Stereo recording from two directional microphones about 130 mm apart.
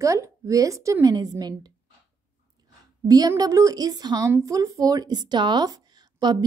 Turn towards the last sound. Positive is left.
turn(degrees=-30)  # may be behind; listen again after turning